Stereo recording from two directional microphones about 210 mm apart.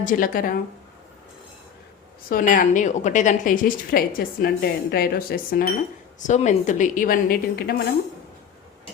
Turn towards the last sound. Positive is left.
turn(degrees=45)  # may be behind; listen again after turning